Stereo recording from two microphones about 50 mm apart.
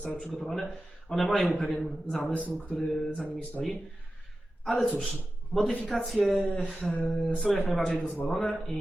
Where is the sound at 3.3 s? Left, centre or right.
Left.